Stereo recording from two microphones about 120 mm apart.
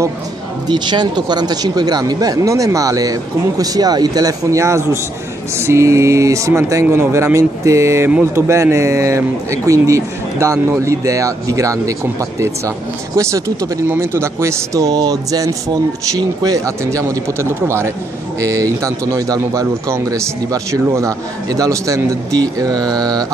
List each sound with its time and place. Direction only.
0.7 s speech: 35° right (ahead or behind)